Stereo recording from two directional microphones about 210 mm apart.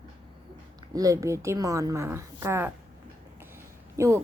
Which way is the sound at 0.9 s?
15° right (ahead or behind).